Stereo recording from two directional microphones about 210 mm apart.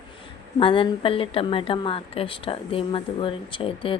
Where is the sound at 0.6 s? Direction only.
25° left (ahead or behind).